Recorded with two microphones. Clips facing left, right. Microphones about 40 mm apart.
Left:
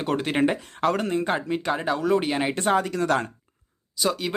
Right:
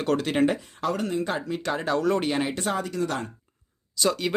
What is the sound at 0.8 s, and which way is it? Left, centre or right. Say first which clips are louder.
Speech: left 7 dB; left.